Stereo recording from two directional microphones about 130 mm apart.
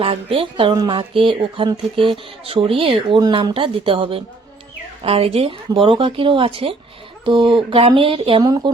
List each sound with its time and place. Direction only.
0.0 s speech: 45° right (ahead or behind)
3.2 s speech: 30° right (ahead or behind)
8.4 s speech: 30° right (ahead or behind)